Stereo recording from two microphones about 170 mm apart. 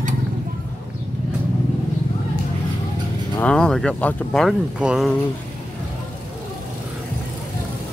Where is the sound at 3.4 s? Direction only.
5° left (ahead or behind).